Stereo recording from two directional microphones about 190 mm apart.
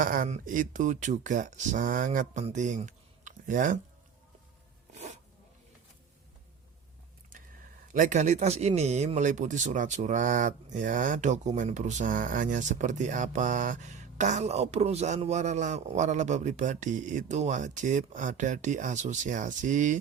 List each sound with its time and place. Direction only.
0.0 s speech: 45° right (ahead or behind)
7.9 s speech: 40° right (ahead or behind)